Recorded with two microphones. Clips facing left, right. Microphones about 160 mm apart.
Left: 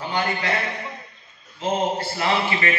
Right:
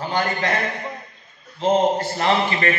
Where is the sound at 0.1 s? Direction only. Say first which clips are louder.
Right 2 dB; 45° right (ahead or behind).